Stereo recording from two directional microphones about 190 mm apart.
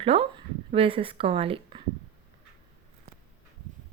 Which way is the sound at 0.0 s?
30° right (ahead or behind).